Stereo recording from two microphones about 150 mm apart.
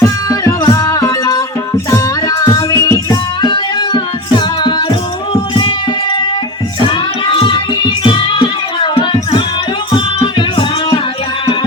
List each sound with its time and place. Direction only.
0.0 s music: 20° left (ahead or behind)
6.8 s music: 35° left (ahead or behind)